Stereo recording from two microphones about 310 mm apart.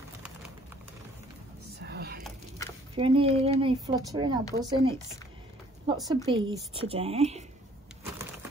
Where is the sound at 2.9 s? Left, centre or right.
Centre.